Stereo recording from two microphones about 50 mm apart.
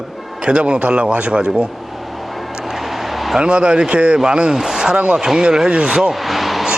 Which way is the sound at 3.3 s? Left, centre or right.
Centre.